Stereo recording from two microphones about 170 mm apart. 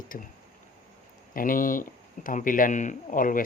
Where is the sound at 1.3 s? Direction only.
55° left (ahead or behind).